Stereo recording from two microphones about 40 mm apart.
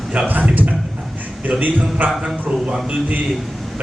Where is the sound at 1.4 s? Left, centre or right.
Right.